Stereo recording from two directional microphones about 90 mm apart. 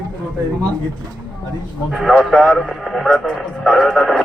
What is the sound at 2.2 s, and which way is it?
Speech, 5° left (ahead or behind).